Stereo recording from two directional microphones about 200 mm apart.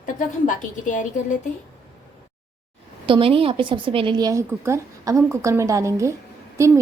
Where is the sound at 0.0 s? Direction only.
40° left (ahead or behind).